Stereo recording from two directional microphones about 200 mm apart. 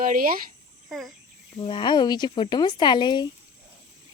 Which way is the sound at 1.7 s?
25° left (ahead or behind).